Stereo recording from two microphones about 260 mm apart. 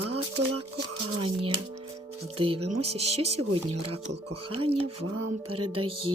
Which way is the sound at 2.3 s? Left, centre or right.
Right.